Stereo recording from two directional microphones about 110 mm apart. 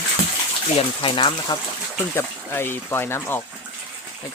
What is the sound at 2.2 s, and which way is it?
Speech, 20° left (ahead or behind).